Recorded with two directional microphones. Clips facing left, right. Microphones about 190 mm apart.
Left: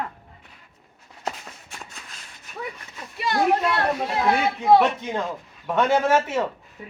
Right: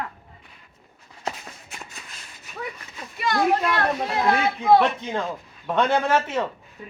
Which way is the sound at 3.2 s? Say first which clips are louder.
Even; 30° left (ahead or behind).